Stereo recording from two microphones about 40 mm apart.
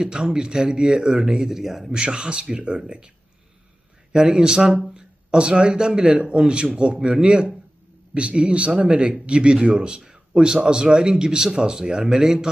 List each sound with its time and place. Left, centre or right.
0.0 s speech: centre
1.9 s speech: right
4.1 s speech: centre